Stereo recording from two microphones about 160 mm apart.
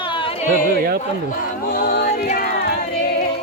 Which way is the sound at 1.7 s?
85° left.